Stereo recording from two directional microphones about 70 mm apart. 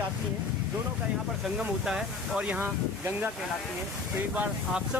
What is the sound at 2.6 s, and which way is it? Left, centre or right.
Speech, right.